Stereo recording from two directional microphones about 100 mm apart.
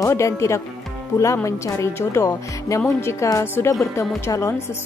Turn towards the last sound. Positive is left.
turn(degrees=30)  # may be behind; listen again after turning